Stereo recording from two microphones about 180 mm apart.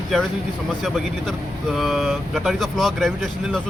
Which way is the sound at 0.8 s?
Centre (ahead or behind).